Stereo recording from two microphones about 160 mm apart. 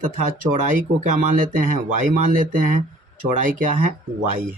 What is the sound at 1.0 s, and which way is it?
Speech, 55° right (ahead or behind).